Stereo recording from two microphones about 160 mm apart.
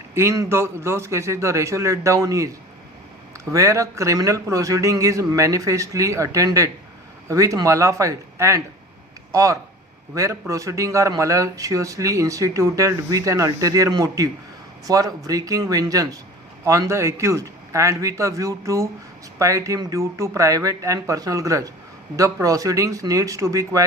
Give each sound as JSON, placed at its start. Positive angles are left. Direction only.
{"t": 0.1, "sound": "a man's voice", "side_deg": -15}